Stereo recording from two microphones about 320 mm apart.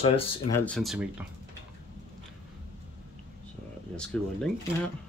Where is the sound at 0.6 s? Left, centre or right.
Centre.